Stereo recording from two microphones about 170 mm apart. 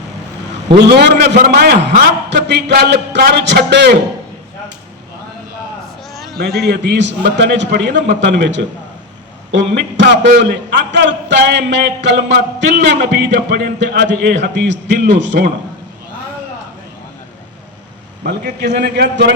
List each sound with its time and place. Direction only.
0.9 s a man's voice: 75° right (ahead or behind)
6.3 s a man's voice: 70° right (ahead or behind)
6.7 s a man's voice: 85° right
18.2 s a man's voice: 65° right (ahead or behind)
18.8 s a man's voice: 80° right